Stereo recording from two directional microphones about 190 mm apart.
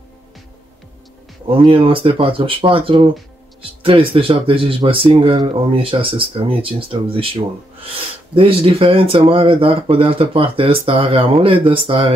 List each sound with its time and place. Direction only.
1.5 s speech: 30° right (ahead or behind)